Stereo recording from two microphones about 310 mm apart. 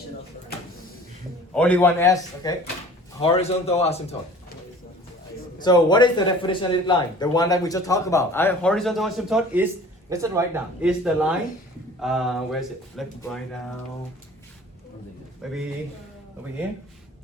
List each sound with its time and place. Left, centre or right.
1.5 s a man's voice: centre
5.5 s speech: centre
15.4 s speech: centre